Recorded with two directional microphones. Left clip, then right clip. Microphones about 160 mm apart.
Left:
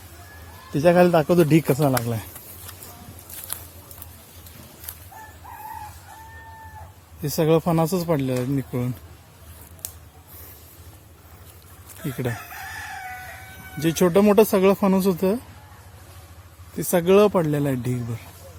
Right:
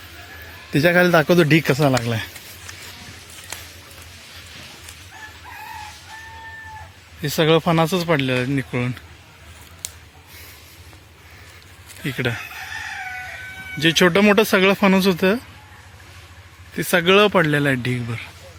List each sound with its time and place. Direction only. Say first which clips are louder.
0.7 s a man's voice: right 1 dB; 20° right (ahead or behind)
1.5 s speech: right 3 dB; centre (ahead or behind)
7.2 s speech: right 3 dB; 10° left (ahead or behind)
12.0 s speech: right 6 dB; centre (ahead or behind)
13.7 s speech: right 4 dB; 5° left (ahead or behind)
16.7 s speech: right 2 dB; 5° left (ahead or behind)